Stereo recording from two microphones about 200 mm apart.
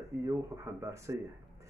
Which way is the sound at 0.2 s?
15° right (ahead or behind).